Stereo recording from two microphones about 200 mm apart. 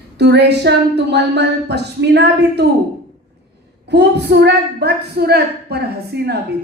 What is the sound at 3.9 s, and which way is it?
A woman's voice, 55° right (ahead or behind).